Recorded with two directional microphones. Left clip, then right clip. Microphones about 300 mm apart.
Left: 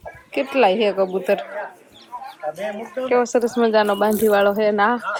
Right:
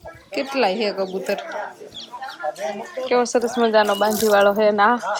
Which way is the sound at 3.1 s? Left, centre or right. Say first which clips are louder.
Left 1 dB; centre.